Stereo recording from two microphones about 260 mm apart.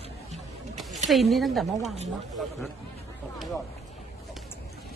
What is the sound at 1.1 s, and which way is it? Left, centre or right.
Speech, centre.